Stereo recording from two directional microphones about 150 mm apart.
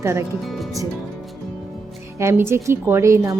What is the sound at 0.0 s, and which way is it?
Speech, 20° right (ahead or behind).